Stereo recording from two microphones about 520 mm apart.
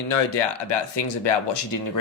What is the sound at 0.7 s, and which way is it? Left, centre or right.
Speech, left.